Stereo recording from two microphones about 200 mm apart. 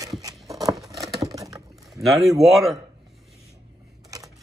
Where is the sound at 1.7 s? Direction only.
Centre (ahead or behind).